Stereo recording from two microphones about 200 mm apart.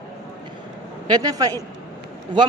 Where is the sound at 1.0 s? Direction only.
20° right (ahead or behind).